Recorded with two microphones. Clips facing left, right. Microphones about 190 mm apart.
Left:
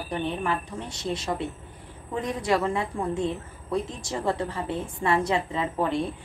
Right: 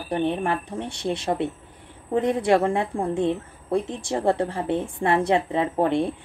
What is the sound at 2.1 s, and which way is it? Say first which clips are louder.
A woman's voice: right 6 dB; 60° right (ahead or behind).